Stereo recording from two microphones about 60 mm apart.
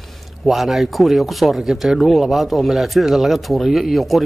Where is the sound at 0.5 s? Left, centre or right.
Centre.